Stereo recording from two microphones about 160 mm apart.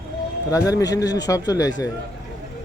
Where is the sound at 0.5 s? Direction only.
20° left (ahead or behind).